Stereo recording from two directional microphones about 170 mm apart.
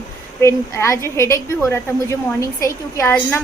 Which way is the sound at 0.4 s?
15° left (ahead or behind).